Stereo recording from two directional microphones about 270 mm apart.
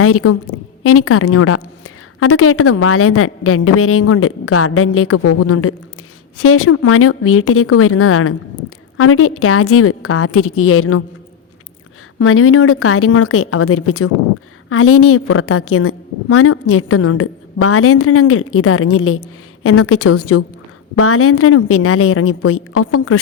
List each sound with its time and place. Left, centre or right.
0.0 s a woman's voice: left
12.2 s a woman's voice: left